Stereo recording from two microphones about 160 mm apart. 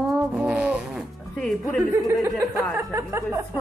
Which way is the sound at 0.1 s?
5° right (ahead or behind).